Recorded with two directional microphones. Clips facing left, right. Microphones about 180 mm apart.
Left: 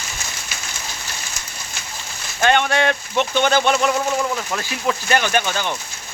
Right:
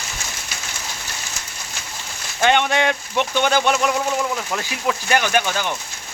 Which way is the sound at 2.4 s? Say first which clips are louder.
Even; 15° right (ahead or behind).